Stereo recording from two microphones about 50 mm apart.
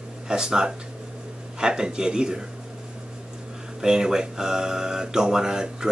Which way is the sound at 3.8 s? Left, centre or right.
Centre.